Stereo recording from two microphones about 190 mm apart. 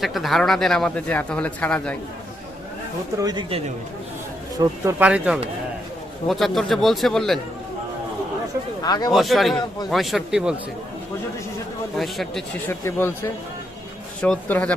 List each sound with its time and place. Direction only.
0.0 s speech: centre (ahead or behind)
3.2 s speech: 20° right (ahead or behind)
4.9 s speech: 5° right (ahead or behind)
8.8 s speech: 20° left (ahead or behind)
9.1 s speech: centre (ahead or behind)
11.9 s speech: centre (ahead or behind)
12.8 s speech: 15° left (ahead or behind)
14.2 s speech: 10° left (ahead or behind)